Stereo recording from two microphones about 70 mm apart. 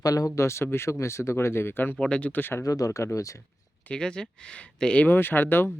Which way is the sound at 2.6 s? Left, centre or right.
Left.